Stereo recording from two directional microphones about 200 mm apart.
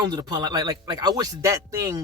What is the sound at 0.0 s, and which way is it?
Speech, 20° right (ahead or behind).